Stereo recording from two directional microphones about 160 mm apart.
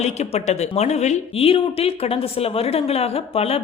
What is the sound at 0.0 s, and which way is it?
Speech, 45° left (ahead or behind).